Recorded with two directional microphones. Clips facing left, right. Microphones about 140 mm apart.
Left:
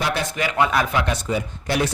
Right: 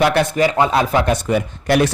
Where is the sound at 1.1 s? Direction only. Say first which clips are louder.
Right 6 dB; 60° right (ahead or behind).